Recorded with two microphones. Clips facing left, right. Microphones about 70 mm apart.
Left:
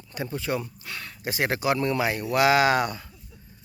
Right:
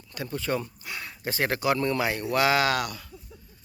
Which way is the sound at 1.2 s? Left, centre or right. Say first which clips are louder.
Left 1 dB; centre.